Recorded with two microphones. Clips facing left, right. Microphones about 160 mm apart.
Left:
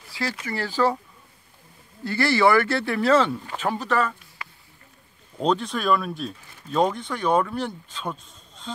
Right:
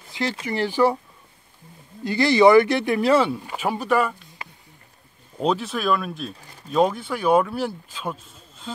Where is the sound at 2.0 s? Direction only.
15° right (ahead or behind).